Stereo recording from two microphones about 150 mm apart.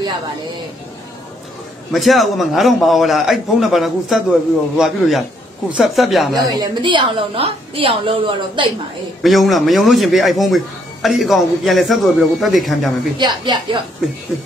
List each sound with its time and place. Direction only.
1.9 s speech: centre (ahead or behind)
6.3 s a woman's voice: 25° right (ahead or behind)
9.2 s speech: centre (ahead or behind)
13.2 s a woman's voice: 30° right (ahead or behind)